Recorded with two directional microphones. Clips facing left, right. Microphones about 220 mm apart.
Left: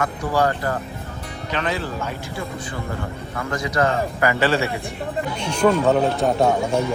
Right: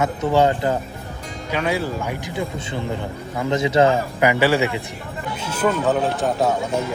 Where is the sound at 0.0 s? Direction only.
25° right (ahead or behind).